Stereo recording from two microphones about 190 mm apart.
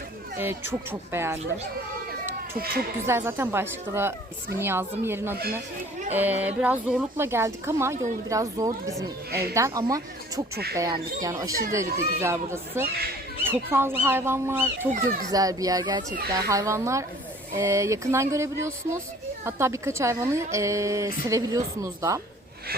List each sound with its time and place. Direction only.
0.3 s speech: 10° right (ahead or behind)
3.1 s speech: 10° right (ahead or behind)
10.5 s speech: 55° right (ahead or behind)
10.8 s speech: 20° right (ahead or behind)